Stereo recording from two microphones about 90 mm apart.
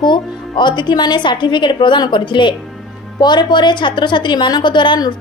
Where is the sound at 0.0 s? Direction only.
55° left (ahead or behind).